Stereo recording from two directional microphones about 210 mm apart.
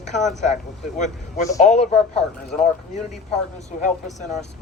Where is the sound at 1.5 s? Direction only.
35° left (ahead or behind).